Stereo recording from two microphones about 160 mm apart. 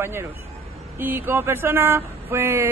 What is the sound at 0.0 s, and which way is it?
Speech, 15° right (ahead or behind).